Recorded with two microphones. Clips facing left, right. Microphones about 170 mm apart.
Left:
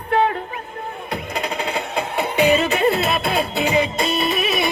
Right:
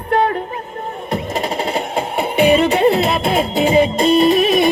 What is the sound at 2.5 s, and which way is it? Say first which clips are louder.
Music: right 6 dB; 30° right (ahead or behind).